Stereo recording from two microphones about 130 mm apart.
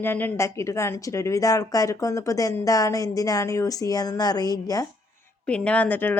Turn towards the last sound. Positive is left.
turn(degrees=15)  # may be behind; listen again after turning